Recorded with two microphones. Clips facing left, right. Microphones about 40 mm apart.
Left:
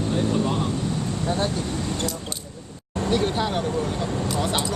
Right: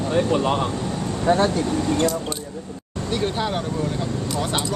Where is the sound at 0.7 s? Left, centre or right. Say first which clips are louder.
Even; right.